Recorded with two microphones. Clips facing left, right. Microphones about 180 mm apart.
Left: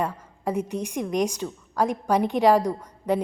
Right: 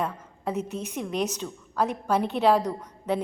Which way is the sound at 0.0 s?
10° left (ahead or behind).